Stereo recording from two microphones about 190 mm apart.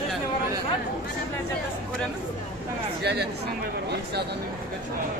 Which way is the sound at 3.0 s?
60° right (ahead or behind).